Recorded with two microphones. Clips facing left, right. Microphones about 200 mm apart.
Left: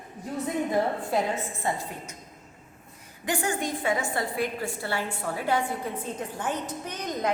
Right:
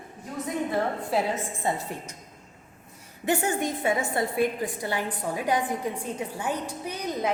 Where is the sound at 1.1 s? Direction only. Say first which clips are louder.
Right 1 dB; centre (ahead or behind).